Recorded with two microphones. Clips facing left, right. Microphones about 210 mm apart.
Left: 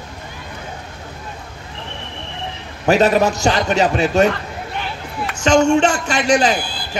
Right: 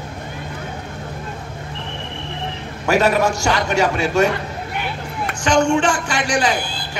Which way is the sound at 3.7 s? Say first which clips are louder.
Left 2 dB; 20° left (ahead or behind).